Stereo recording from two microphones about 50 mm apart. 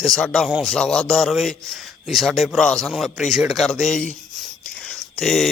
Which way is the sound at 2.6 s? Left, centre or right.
Centre.